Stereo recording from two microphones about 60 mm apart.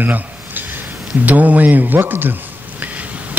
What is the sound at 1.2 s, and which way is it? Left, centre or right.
Speech, right.